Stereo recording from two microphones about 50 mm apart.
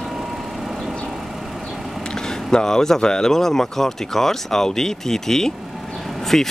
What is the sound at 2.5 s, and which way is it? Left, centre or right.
Speech, centre.